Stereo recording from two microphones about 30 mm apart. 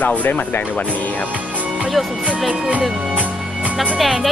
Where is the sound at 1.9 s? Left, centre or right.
Centre.